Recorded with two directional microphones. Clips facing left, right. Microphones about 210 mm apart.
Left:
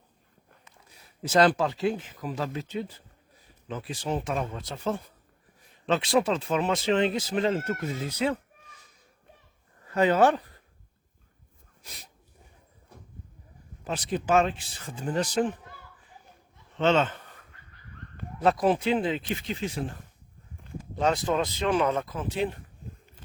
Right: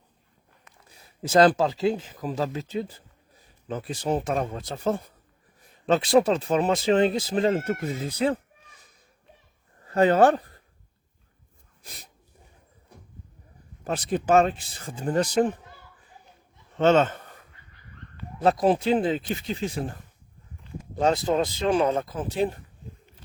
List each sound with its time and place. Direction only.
1.3 s speech: 35° right (ahead or behind)
9.8 s speech: 40° right (ahead or behind)
11.8 s sneeze: 40° right (ahead or behind)
13.8 s speech: 45° right (ahead or behind)
16.7 s speech: 45° right (ahead or behind)
18.4 s speech: 35° right (ahead or behind)
21.0 s speech: 35° right (ahead or behind)